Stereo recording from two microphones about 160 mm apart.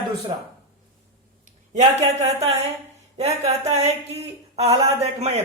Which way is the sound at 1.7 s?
45° right (ahead or behind).